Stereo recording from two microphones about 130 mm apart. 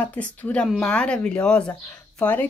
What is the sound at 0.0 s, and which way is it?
Speech, 10° left (ahead or behind).